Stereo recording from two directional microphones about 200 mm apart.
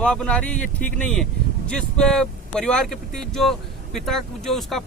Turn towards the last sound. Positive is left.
turn(degrees=0)  # may be behind; listen again after turning